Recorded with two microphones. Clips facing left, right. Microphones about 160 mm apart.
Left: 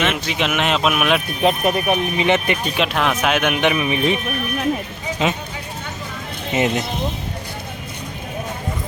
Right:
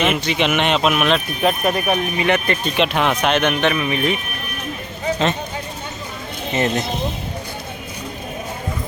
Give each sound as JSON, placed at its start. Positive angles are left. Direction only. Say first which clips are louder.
{"t": 0.0, "sound": "speech", "louder": "right 2 dB", "side_deg": 0}
{"t": 1.4, "sound": "speech", "louder": "left 1 dB", "side_deg": 25}
{"t": 2.7, "sound": "speech", "louder": "right 4 dB", "side_deg": 0}
{"t": 6.5, "sound": "speech", "louder": "left 1 dB", "side_deg": 15}